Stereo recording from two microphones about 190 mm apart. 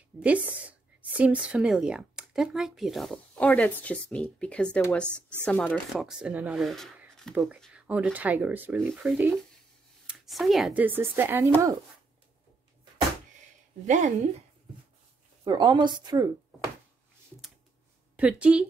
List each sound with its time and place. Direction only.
0.2 s speech: 5° right (ahead or behind)
13.8 s speech: 40° right (ahead or behind)
15.4 s a woman's voice: 20° right (ahead or behind)
18.1 s speech: 5° right (ahead or behind)